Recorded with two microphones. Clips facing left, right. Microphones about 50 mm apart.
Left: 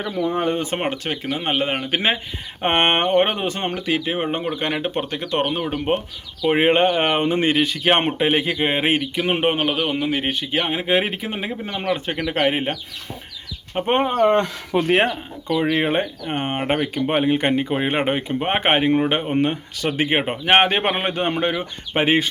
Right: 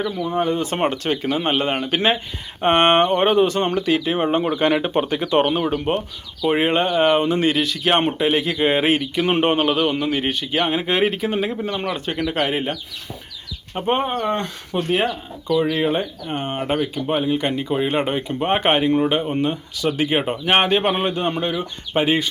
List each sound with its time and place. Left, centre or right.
0.3 s speech: left
0.8 s a man's voice: centre
2.6 s speech: left; by 5.7 s centre
5.7 s a man's voice: centre
8.5 s a man's voice: centre
9.1 s a man's voice: centre; by 12.7 s left
13.7 s speech: left
14.1 s speech: left
15.4 s speech: left